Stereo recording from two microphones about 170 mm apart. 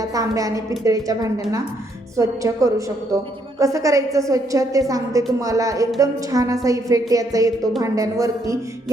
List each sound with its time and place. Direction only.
0.0 s a woman's voice: 20° right (ahead or behind)